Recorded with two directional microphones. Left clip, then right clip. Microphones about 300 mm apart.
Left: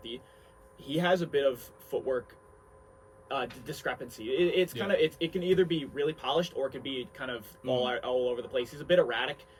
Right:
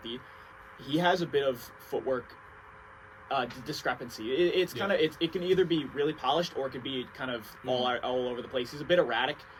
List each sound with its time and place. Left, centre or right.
0.9 s speech: centre
3.2 s speech: centre